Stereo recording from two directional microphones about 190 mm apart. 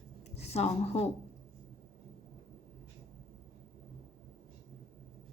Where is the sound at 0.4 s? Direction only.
35° left (ahead or behind).